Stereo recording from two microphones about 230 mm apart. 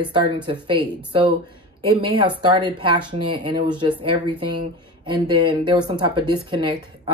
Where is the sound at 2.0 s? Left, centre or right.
Right.